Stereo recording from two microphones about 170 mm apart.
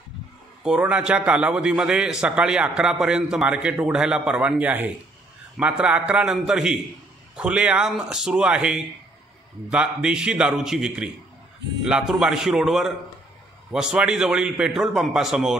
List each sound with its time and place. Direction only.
0.7 s a man's voice: 5° right (ahead or behind)